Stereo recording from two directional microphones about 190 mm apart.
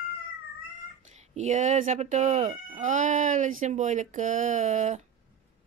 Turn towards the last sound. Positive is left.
turn(degrees=-40)  # may be behind; listen again after turning